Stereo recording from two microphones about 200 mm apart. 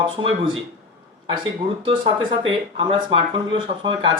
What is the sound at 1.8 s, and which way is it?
Speech, 25° right (ahead or behind).